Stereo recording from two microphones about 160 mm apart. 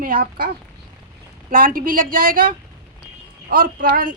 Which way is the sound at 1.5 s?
60° right (ahead or behind).